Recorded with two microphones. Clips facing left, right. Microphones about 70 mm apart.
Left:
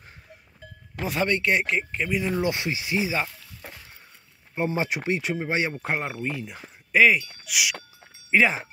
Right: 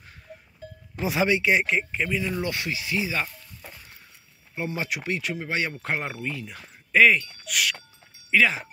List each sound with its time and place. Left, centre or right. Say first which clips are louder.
1.0 s speech: right 2 dB; centre
2.2 s speech: left 3 dB; left; by 6.2 s centre
6.2 s speech: left 2 dB; centre
8.3 s speech: left 1 dB; left